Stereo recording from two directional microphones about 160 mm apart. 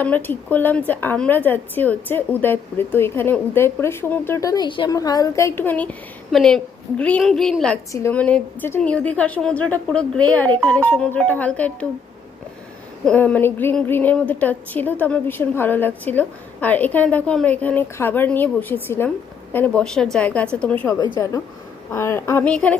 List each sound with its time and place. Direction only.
0.0 s a woman's voice: 10° left (ahead or behind)
13.1 s a woman's voice: 10° left (ahead or behind)